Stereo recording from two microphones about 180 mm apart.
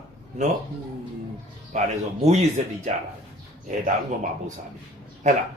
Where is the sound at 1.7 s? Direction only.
40° right (ahead or behind).